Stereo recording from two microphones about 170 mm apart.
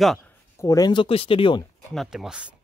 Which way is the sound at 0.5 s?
20° left (ahead or behind).